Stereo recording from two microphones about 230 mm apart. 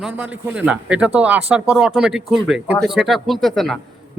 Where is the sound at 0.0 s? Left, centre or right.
Centre.